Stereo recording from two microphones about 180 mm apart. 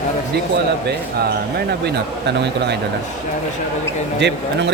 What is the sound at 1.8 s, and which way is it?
Speech, 70° right (ahead or behind).